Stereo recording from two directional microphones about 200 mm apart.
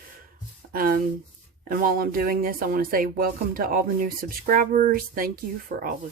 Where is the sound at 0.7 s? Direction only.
45° right (ahead or behind).